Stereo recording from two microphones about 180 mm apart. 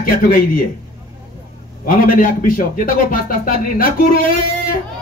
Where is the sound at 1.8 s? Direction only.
50° left (ahead or behind).